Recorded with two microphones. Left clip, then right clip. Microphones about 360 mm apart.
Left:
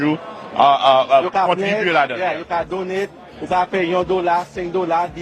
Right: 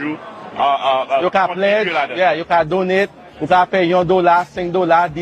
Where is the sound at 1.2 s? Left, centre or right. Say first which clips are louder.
Right 2 dB; right.